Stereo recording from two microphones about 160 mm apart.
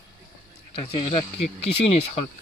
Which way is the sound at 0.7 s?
35° left (ahead or behind).